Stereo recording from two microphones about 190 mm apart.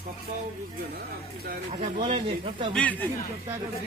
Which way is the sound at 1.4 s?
45° right (ahead or behind).